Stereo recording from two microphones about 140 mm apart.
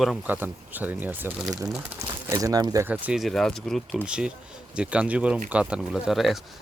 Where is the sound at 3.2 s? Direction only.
Centre (ahead or behind).